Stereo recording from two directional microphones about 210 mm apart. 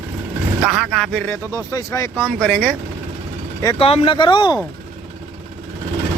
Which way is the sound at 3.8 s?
25° left (ahead or behind).